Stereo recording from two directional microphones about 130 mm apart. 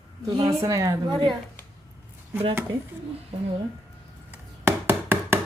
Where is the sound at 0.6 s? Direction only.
25° right (ahead or behind).